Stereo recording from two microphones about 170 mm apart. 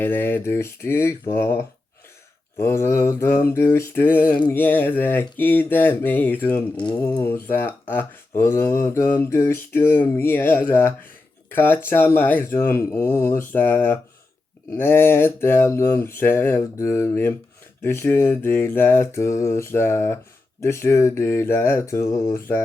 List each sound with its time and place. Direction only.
0.0 s mantra: 10° left (ahead or behind)